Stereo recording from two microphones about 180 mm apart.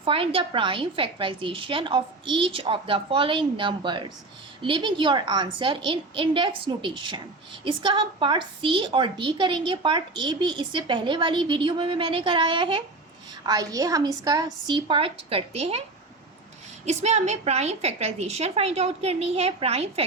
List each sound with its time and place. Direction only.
0.0 s a woman's voice: 30° right (ahead or behind)
16.8 s a woman's voice: 40° right (ahead or behind)